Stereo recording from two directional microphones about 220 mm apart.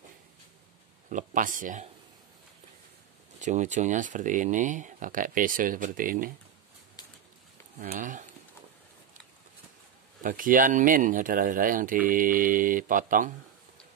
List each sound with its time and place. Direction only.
1.0 s speech: 35° right (ahead or behind)
3.3 s speech: 35° right (ahead or behind)
7.8 s speech: 35° right (ahead or behind)
10.2 s speech: 40° right (ahead or behind)